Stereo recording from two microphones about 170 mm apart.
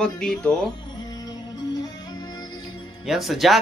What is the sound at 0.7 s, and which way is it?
Music, 25° left (ahead or behind).